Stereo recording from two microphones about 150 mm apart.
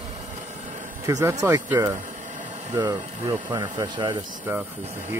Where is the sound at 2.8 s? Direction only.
25° right (ahead or behind).